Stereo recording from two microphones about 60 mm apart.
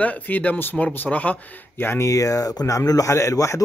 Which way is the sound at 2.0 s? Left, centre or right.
Left.